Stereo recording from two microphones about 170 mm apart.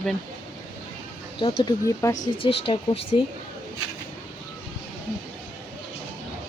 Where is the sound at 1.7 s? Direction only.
20° left (ahead or behind).